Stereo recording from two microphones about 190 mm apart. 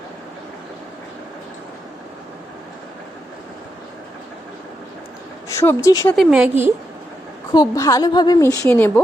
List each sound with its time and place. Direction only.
5.5 s a woman's voice: 15° left (ahead or behind)
6.1 s speech: 5° right (ahead or behind)
7.5 s a woman's voice: 20° left (ahead or behind)